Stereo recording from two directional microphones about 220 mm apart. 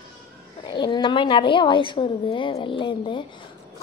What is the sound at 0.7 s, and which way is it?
A woman's voice, 20° left (ahead or behind).